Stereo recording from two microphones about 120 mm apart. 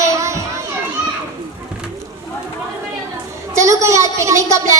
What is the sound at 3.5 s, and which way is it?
A woman's voice, 25° right (ahead or behind).